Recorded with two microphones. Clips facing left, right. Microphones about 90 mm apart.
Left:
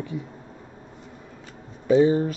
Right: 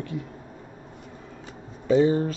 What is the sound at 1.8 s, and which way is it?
Speech, 15° left (ahead or behind).